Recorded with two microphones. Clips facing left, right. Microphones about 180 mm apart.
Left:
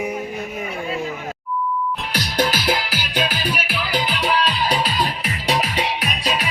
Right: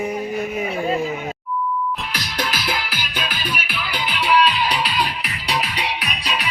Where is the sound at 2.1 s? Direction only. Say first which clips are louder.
Left 5 dB; 40° left (ahead or behind).